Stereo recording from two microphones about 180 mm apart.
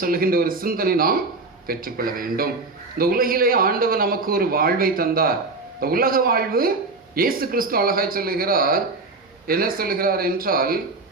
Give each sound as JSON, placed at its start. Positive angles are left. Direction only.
{"t": 0.0, "sound": "speech", "side_deg": -55}